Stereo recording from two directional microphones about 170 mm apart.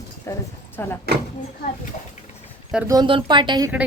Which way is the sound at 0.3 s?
15° left (ahead or behind).